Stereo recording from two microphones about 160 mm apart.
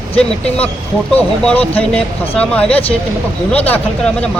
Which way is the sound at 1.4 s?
10° left (ahead or behind).